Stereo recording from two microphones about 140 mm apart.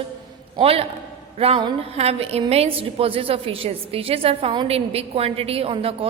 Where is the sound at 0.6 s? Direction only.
45° right (ahead or behind).